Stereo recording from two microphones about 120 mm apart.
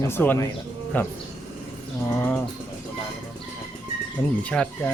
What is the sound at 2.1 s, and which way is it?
Bird, 15° left (ahead or behind).